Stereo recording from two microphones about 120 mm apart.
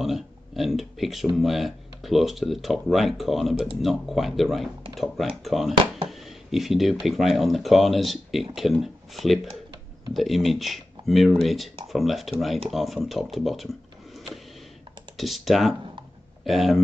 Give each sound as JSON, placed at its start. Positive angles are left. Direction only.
{"t": 0.0, "sound": "speech", "side_deg": 0}